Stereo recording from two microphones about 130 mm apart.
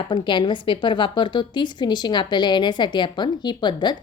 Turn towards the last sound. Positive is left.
turn(degrees=35)  # may be behind; listen again after turning